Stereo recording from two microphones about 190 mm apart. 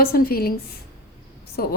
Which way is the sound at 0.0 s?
50° left (ahead or behind).